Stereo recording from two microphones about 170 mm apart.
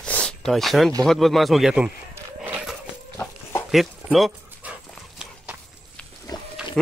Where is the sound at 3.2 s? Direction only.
15° left (ahead or behind).